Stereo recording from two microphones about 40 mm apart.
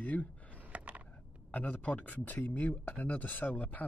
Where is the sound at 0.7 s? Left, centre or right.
Right.